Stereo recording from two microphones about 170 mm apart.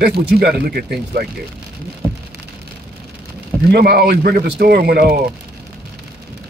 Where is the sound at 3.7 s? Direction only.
65° right (ahead or behind).